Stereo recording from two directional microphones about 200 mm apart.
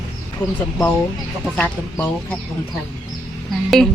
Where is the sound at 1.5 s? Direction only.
10° left (ahead or behind).